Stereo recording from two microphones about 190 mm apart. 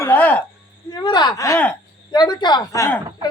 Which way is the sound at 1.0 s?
20° left (ahead or behind).